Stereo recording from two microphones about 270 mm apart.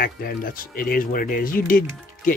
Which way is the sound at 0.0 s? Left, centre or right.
Left.